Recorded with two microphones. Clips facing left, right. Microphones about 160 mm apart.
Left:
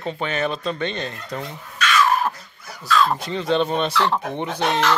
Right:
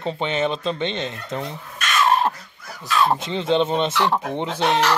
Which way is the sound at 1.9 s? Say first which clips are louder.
Right 1 dB; 25° right (ahead or behind).